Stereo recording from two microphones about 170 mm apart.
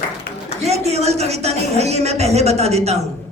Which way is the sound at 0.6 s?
40° right (ahead or behind).